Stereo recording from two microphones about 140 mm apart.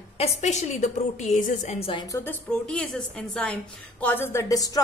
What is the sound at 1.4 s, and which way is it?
Speech, 70° left (ahead or behind).